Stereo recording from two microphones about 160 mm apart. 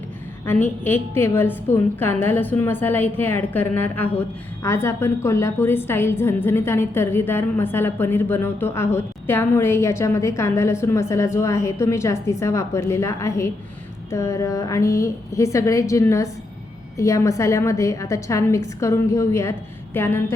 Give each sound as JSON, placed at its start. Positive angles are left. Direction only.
{"t": 0.4, "sound": "a woman's voice", "side_deg": 10}